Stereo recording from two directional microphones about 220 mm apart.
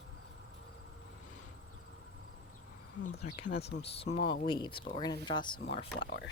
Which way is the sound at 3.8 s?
25° left (ahead or behind).